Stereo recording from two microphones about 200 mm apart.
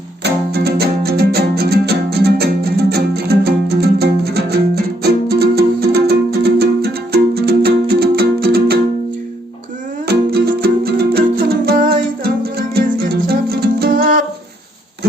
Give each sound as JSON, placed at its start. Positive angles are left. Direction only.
{"t": 0.2, "sound": "music", "side_deg": -55}
{"t": 10.1, "sound": "music", "side_deg": -50}